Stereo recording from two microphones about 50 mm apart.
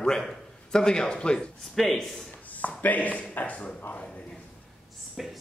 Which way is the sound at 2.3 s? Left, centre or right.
Left.